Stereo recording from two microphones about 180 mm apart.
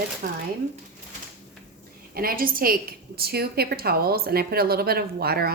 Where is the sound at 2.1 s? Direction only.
55° right (ahead or behind).